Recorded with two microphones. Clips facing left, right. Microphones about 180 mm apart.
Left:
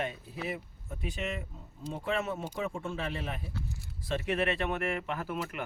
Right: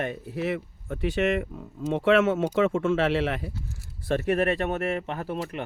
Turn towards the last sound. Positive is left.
turn(degrees=-30)  # may be behind; listen again after turning